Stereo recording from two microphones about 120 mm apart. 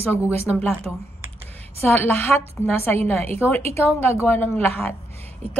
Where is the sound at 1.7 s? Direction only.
20° left (ahead or behind).